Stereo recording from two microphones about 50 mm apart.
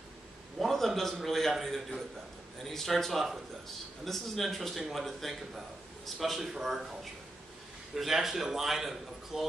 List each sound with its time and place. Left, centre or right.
0.6 s a sound: centre
1.1 s a man's voice: centre
7.9 s a man's voice: centre